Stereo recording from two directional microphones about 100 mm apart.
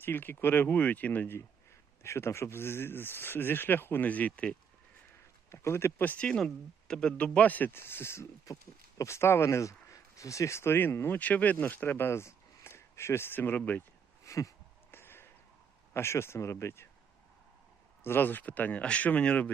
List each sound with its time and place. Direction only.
0.0 s speech: 20° left (ahead or behind)
5.5 s speech: 25° left (ahead or behind)
14.3 s a sound: 30° left (ahead or behind)
15.9 s speech: 25° left (ahead or behind)
18.0 s speech: 20° left (ahead or behind)